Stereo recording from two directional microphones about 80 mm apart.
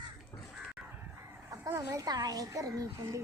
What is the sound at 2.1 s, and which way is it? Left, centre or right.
A child's voice, right.